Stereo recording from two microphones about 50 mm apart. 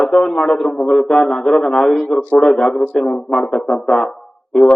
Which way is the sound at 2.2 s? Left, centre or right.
Left.